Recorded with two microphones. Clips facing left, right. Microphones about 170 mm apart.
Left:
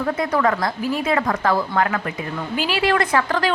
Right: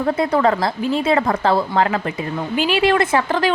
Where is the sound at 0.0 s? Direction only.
30° right (ahead or behind).